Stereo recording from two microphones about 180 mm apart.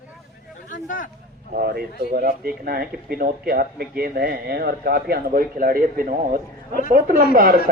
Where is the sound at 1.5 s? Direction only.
60° right (ahead or behind).